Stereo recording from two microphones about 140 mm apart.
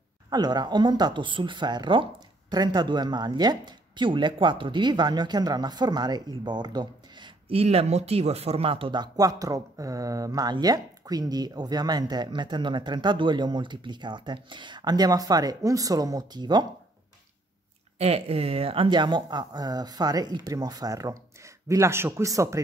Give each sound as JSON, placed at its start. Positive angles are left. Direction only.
{"t": 0.3, "sound": "speech", "side_deg": -30}
{"t": 17.9, "sound": "speech", "side_deg": -45}